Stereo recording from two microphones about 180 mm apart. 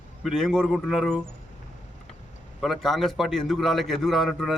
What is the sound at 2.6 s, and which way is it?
A man's voice, centre (ahead or behind).